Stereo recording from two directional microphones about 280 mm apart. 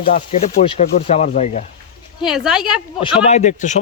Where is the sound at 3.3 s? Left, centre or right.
Left.